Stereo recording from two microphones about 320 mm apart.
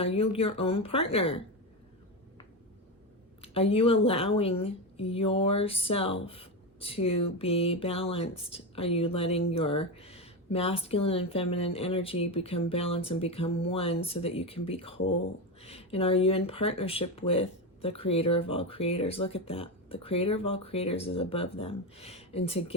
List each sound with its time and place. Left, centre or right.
0.0 s speech: centre
3.4 s speech: centre